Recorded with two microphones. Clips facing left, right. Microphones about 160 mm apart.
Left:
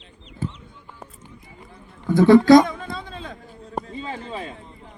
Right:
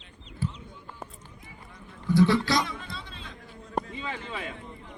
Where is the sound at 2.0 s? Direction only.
50° left (ahead or behind).